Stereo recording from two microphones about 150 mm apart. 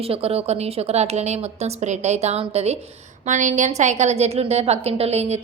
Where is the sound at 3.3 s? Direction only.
55° right (ahead or behind).